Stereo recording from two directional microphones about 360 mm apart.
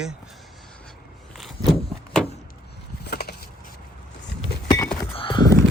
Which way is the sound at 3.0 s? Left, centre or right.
Left.